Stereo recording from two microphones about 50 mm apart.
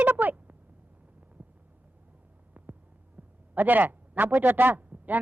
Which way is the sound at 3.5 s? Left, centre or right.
Right.